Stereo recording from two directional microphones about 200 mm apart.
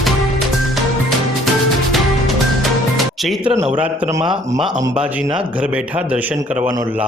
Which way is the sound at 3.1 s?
Centre (ahead or behind).